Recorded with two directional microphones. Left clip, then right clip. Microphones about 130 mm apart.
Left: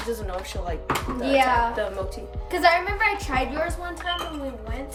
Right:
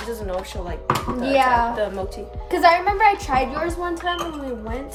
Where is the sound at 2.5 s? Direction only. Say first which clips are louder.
Right 4 dB; 60° right (ahead or behind).